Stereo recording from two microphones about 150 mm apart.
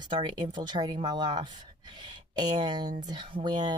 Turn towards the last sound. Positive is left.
turn(degrees=-30)  # may be behind; listen again after turning